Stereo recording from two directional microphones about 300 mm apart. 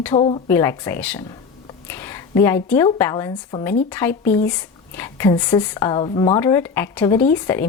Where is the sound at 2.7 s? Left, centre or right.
Centre.